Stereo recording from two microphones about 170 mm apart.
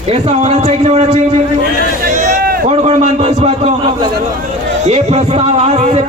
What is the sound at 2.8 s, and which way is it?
Speech, 40° right (ahead or behind).